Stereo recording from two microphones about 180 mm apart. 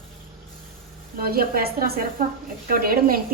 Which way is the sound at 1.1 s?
55° right (ahead or behind).